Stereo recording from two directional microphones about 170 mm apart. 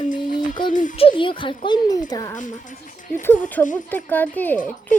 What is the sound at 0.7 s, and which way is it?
Speech, 50° left (ahead or behind).